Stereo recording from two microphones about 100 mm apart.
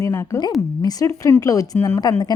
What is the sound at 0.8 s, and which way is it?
Speech, 40° left (ahead or behind).